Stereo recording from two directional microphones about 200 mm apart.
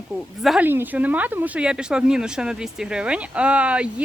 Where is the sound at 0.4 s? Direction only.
5° right (ahead or behind).